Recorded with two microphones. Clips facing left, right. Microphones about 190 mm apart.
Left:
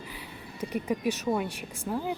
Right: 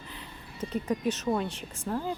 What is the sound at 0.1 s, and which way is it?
Speech, 10° left (ahead or behind).